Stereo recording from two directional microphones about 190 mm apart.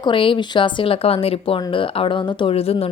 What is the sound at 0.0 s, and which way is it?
Speech, 25° left (ahead or behind).